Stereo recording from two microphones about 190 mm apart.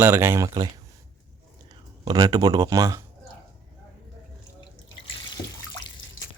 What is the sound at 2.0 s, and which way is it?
Speech, 20° right (ahead or behind).